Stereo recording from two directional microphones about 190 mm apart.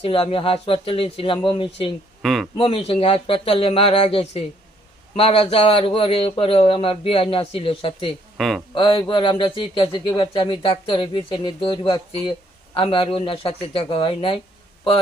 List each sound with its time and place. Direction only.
0.0 s speech: 30° left (ahead or behind)
2.2 s speech: centre (ahead or behind)
2.6 s speech: 30° left (ahead or behind)
8.4 s speech: centre (ahead or behind)
8.7 s speech: 25° left (ahead or behind)